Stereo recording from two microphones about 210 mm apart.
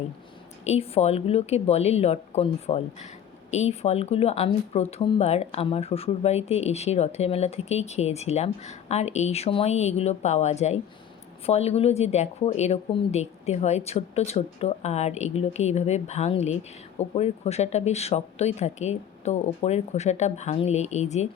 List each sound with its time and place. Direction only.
0.6 s speech: 30° left (ahead or behind)